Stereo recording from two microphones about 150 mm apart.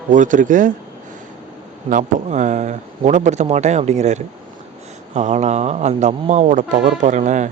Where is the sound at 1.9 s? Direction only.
55° right (ahead or behind).